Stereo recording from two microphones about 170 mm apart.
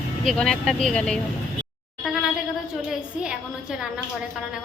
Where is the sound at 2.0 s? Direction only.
5° right (ahead or behind).